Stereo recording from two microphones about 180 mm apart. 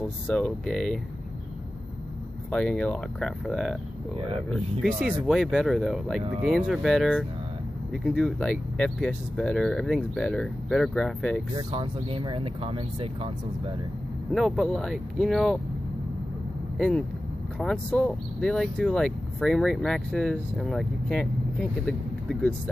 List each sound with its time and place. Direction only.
0.3 s speech: 5° left (ahead or behind)
2.5 s speech: 5° left (ahead or behind)
5.2 s speech: centre (ahead or behind)
11.5 s speech: 25° right (ahead or behind)
14.3 s speech: centre (ahead or behind)
16.7 s speech: 5° left (ahead or behind)